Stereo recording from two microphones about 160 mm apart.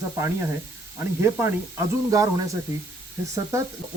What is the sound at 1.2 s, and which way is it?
Speech, 15° right (ahead or behind).